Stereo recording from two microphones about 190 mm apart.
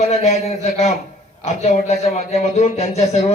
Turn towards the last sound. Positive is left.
turn(degrees=35)  # may be behind; listen again after turning